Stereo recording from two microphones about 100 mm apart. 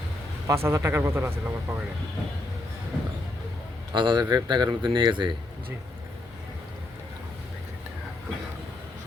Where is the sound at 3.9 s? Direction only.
50° right (ahead or behind).